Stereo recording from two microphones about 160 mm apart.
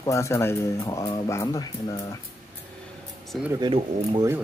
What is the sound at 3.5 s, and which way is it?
Speech, 30° right (ahead or behind).